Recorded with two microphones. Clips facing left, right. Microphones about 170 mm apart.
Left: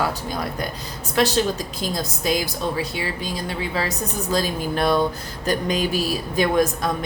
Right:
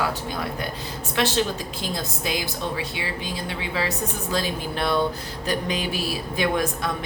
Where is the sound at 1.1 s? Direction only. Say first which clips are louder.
Left 4 dB; 40° left (ahead or behind).